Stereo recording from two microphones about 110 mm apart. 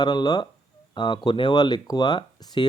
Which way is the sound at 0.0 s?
40° left (ahead or behind).